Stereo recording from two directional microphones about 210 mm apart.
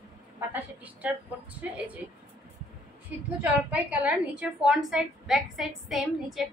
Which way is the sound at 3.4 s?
5° right (ahead or behind).